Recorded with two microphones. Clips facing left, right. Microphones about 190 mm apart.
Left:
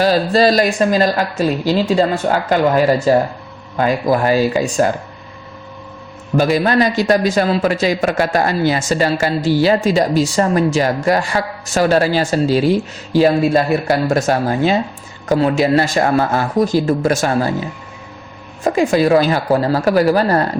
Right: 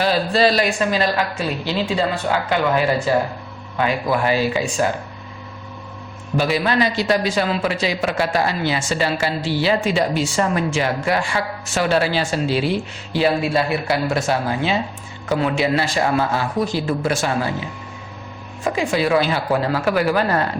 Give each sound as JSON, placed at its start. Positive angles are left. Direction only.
{"t": 0.0, "sound": "a woman's voice", "side_deg": 40}
{"t": 6.3, "sound": "a man's voice", "side_deg": 45}
{"t": 18.6, "sound": "a woman's voice", "side_deg": 45}